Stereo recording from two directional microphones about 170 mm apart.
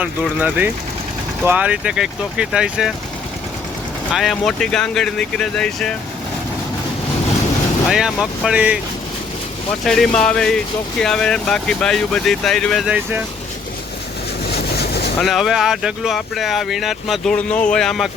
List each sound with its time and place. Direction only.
0.0 s speech: 10° right (ahead or behind)
4.1 s speech: centre (ahead or behind)
7.9 s speech: 5° right (ahead or behind)
9.8 s speech: centre (ahead or behind)
14.5 s vehicle: 70° left (ahead or behind)
15.2 s speech: centre (ahead or behind)